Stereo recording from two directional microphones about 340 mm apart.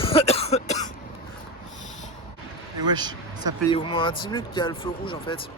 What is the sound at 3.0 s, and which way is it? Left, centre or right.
Speech, centre.